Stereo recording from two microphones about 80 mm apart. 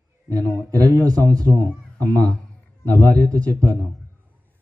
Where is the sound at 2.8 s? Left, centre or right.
Right.